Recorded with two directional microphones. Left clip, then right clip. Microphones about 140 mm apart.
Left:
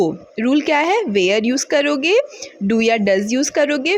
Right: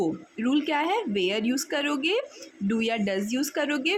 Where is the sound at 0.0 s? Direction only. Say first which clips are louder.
Left 9 dB; 40° left (ahead or behind).